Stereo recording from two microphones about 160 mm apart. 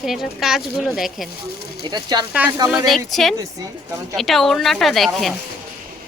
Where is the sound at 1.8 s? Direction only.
25° right (ahead or behind).